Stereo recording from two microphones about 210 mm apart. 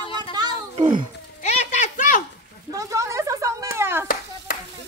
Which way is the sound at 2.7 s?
15° right (ahead or behind).